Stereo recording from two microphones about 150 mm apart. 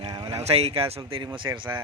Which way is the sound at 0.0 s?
30° right (ahead or behind).